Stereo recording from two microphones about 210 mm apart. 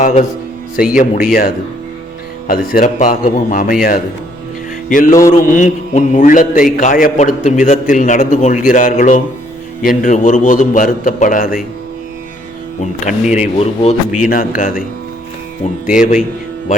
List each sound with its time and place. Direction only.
0.0 s a man's voice: 35° left (ahead or behind)
2.5 s a man's voice: 40° left (ahead or behind)
12.8 s a man's voice: 35° left (ahead or behind)
14.3 s a man's voice: 40° left (ahead or behind)
16.0 s a man's voice: 35° left (ahead or behind)